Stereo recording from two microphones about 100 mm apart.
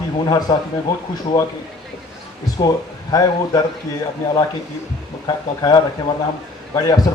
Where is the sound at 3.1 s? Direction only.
40° left (ahead or behind).